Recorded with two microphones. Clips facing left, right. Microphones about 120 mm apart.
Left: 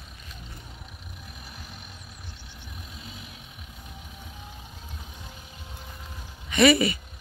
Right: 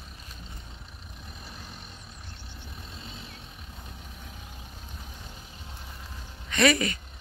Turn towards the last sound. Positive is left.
turn(degrees=5)  # may be behind; listen again after turning